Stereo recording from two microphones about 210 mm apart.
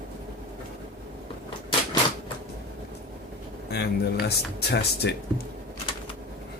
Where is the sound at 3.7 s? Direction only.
50° left (ahead or behind).